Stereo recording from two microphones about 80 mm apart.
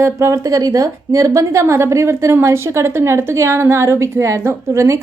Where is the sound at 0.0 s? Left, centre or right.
Right.